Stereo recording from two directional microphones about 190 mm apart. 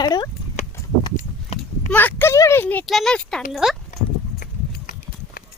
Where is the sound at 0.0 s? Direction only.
20° left (ahead or behind).